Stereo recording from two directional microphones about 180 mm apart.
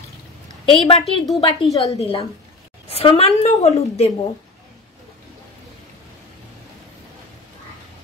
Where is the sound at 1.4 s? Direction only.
30° left (ahead or behind).